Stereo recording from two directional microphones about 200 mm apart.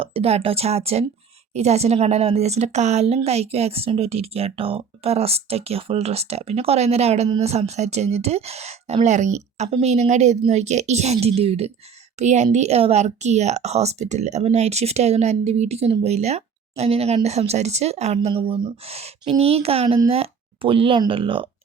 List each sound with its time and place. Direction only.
0.0 s speech: 30° right (ahead or behind)